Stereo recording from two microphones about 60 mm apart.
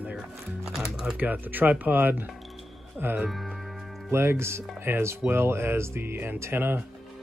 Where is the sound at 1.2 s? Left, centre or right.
Right.